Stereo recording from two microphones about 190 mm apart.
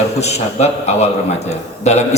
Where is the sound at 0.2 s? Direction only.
35° left (ahead or behind).